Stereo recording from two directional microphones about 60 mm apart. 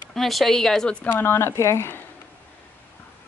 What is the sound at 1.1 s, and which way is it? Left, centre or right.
Speech, left.